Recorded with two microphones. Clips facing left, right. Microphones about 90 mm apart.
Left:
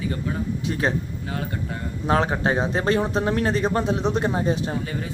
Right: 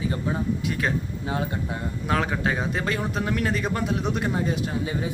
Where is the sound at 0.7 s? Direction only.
30° left (ahead or behind).